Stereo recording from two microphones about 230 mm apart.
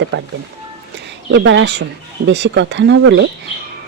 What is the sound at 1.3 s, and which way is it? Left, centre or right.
Speech, right.